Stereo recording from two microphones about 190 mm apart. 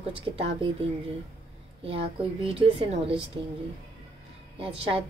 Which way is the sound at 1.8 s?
30° right (ahead or behind).